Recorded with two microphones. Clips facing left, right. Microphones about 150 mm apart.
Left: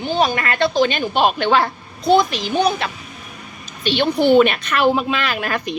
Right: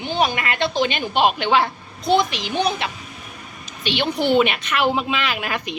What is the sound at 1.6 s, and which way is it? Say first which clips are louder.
Speech: left 2 dB; 50° left (ahead or behind).